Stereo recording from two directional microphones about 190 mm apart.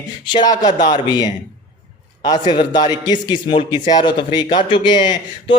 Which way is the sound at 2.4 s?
25° left (ahead or behind).